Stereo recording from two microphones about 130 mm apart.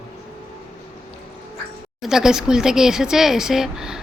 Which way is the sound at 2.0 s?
5° right (ahead or behind).